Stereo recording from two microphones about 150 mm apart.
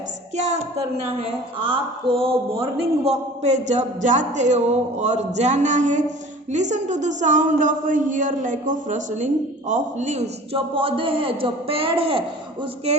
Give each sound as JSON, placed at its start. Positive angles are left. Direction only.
{"t": 0.3, "sound": "a woman's voice", "side_deg": -50}